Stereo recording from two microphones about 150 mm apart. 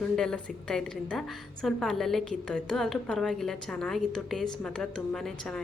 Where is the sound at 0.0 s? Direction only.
5° left (ahead or behind).